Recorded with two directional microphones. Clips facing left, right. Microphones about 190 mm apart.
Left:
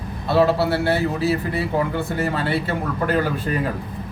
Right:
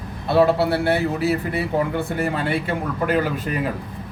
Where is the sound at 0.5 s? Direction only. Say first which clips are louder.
Even; 20° right (ahead or behind).